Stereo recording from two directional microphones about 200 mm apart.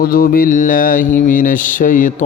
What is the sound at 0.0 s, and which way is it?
Mantra, 45° left (ahead or behind).